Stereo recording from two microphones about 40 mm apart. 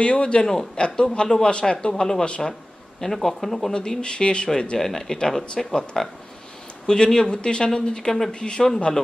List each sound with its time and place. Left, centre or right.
0.0 s speech: left
2.2 s speech: left
3.0 s speech: centre
3.7 s speech: centre